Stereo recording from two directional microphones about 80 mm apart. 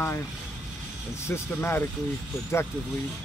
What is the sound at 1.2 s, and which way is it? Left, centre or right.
Speech, left.